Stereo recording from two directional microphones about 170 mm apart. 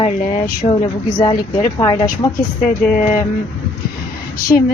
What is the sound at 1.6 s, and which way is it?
Speech, 15° left (ahead or behind).